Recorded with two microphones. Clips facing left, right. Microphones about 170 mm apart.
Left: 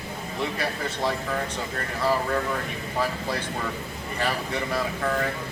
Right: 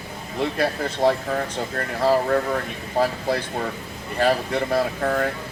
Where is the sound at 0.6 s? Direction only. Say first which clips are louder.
Right 11 dB; 45° right (ahead or behind).